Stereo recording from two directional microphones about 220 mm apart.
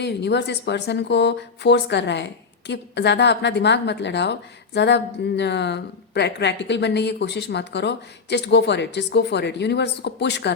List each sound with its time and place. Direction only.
0.0 s speech: 50° left (ahead or behind)